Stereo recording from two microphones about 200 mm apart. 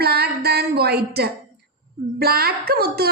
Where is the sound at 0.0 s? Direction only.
55° right (ahead or behind).